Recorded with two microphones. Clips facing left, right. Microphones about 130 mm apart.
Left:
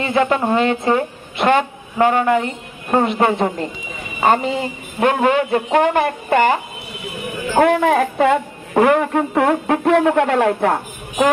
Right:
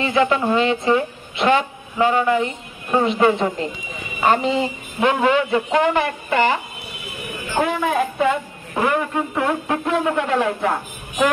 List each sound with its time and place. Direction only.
0.0 s a woman's voice: 45° left (ahead or behind)
7.5 s a woman's voice: 60° left (ahead or behind)